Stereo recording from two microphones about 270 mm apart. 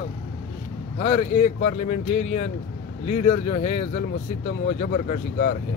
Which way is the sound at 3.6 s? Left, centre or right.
Left.